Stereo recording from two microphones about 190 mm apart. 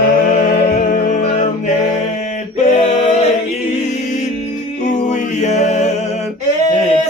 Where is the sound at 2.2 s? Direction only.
35° left (ahead or behind).